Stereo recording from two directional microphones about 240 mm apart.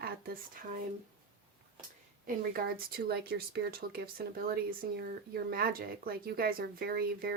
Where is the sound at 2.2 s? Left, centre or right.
Right.